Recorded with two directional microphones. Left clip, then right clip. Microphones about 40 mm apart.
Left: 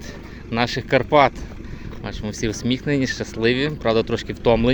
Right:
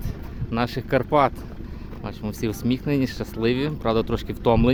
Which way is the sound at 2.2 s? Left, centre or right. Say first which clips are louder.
Left 3 dB; right.